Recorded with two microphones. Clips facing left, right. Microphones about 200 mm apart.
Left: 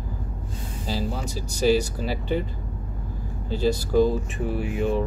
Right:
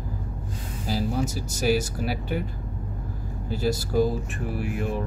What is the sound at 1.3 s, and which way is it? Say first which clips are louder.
Speech: left 7 dB; 10° right (ahead or behind).